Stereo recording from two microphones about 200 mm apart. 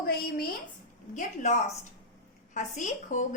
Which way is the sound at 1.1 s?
40° left (ahead or behind).